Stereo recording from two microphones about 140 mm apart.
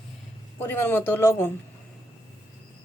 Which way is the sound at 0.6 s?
15° left (ahead or behind).